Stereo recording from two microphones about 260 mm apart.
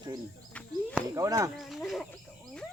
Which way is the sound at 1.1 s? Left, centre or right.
Centre.